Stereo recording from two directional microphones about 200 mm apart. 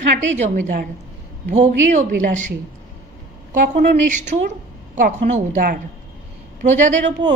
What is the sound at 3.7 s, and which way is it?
A woman's voice, 35° right (ahead or behind).